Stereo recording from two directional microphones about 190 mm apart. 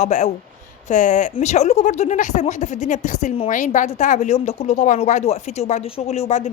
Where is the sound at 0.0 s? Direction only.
40° left (ahead or behind).